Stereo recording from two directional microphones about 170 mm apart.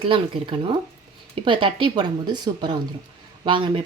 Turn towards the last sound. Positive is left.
turn(degrees=-30)  # may be behind; listen again after turning